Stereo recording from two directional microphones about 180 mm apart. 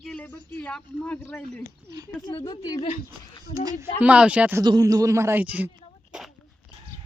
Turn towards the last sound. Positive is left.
turn(degrees=-10)  # may be behind; listen again after turning